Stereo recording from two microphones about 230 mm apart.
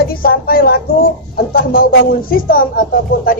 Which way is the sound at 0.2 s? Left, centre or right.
Left.